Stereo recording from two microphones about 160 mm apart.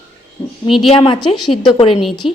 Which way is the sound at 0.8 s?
30° left (ahead or behind).